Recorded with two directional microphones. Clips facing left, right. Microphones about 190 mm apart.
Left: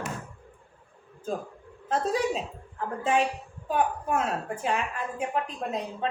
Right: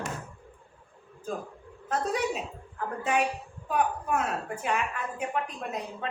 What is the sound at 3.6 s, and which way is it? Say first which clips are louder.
A woman's voice: left 1 dB; 30° left (ahead or behind).